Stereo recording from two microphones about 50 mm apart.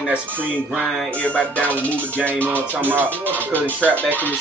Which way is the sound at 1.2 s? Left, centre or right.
Left.